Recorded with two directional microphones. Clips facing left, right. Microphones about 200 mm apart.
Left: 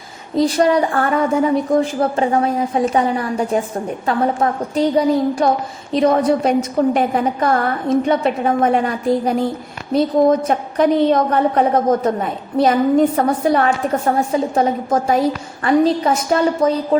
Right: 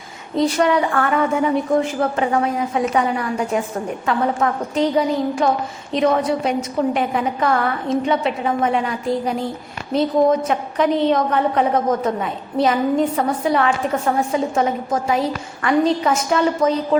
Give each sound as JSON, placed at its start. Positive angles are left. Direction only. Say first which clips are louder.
{"t": 0.3, "sound": "a woman's voice", "louder": "left 2 dB", "side_deg": 35}